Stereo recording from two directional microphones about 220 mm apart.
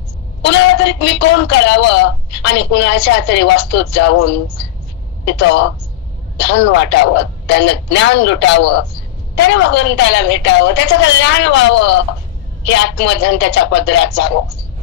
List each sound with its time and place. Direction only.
0.5 s a woman's voice: 55° left (ahead or behind)